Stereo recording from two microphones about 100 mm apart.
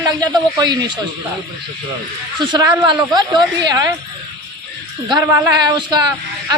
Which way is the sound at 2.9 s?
45° right (ahead or behind).